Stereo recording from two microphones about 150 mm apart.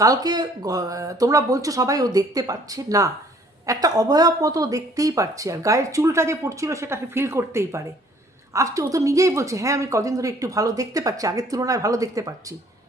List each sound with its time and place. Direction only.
0.0 s speech: 25° right (ahead or behind)